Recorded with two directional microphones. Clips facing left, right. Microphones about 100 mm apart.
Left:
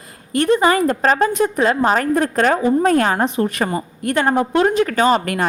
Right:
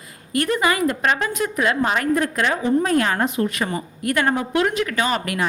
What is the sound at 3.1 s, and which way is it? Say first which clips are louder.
Speech: left 3 dB; 25° left (ahead or behind).